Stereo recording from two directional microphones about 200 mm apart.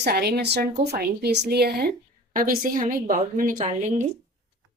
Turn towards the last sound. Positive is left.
turn(degrees=-35)  # may be behind; listen again after turning